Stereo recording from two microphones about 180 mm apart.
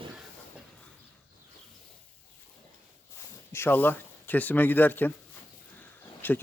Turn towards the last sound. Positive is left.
turn(degrees=10)  # may be behind; listen again after turning